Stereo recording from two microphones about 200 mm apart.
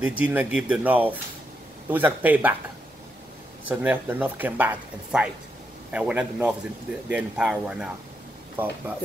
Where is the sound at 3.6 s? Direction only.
10° right (ahead or behind).